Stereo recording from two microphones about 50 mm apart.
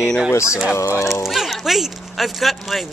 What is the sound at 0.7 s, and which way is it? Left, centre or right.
Speech, left.